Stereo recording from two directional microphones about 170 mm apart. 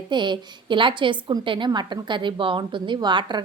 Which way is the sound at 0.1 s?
25° right (ahead or behind).